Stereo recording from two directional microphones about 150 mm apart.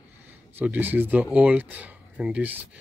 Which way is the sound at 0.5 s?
10° right (ahead or behind).